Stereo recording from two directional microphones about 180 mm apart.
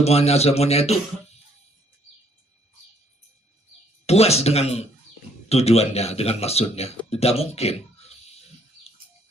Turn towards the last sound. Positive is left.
turn(degrees=35)  # may be behind; listen again after turning